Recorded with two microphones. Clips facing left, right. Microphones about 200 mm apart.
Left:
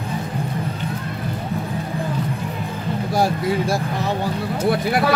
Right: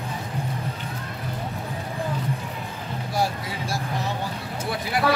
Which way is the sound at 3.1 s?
50° left (ahead or behind).